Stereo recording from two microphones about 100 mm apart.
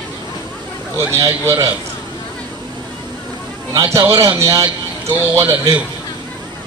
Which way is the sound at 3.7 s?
35° right (ahead or behind).